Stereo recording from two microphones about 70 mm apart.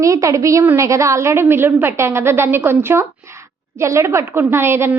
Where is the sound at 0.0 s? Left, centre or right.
Right.